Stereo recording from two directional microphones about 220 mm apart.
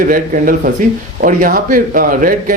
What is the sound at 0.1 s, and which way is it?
Speech, 40° right (ahead or behind).